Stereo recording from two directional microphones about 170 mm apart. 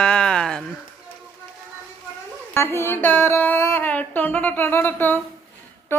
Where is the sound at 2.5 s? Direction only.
15° left (ahead or behind).